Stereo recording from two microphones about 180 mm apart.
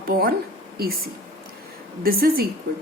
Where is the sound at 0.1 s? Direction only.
55° right (ahead or behind).